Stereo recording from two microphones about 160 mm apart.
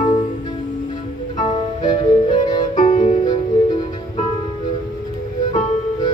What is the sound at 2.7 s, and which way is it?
Music, 50° left (ahead or behind).